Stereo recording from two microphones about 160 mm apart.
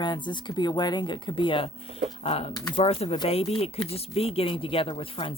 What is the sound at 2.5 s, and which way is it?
Speech, 25° left (ahead or behind).